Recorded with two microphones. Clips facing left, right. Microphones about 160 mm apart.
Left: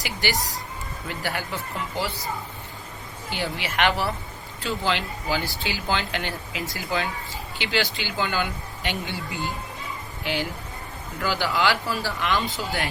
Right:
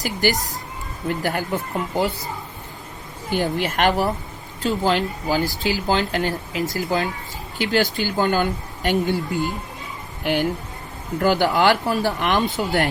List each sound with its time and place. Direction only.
0.0 s speech: 45° right (ahead or behind)
3.2 s speech: 50° right (ahead or behind)
11.2 s speech: 50° right (ahead or behind)